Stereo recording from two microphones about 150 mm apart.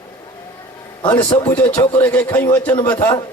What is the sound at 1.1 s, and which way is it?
Speech, 25° left (ahead or behind).